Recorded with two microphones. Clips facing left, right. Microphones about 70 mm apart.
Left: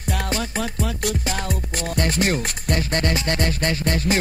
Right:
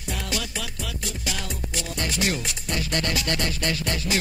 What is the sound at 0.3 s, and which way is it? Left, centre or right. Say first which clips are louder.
Music: left 6 dB; left.